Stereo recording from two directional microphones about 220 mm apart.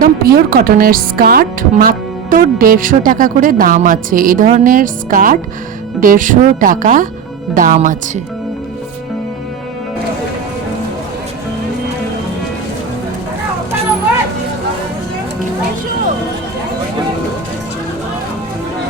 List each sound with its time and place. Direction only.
0.0 s speech: 40° right (ahead or behind)